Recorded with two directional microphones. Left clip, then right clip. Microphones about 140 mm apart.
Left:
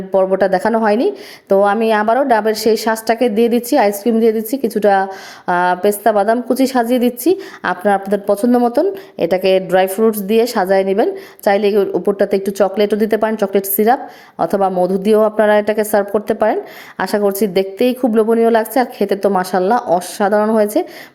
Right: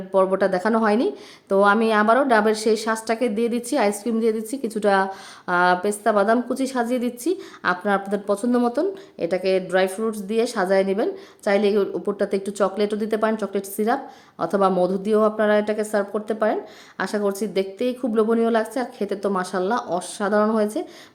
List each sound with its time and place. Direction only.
0.1 s a woman's voice: 20° left (ahead or behind)